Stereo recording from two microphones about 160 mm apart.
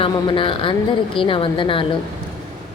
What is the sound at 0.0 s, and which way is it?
A woman's voice, 35° left (ahead or behind).